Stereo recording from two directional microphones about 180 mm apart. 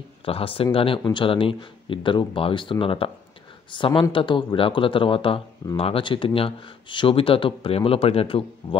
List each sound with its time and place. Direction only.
0.2 s speech: 30° left (ahead or behind)